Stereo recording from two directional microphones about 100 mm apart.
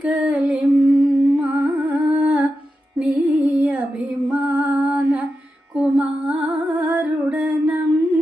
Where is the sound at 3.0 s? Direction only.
15° right (ahead or behind).